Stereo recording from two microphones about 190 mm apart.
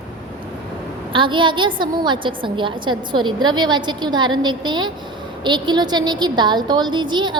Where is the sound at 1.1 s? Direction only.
25° right (ahead or behind).